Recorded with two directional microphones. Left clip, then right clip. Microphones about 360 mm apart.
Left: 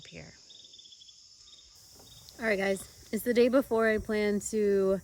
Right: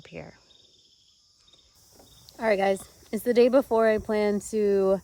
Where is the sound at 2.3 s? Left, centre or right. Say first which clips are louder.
Right 6 dB; centre.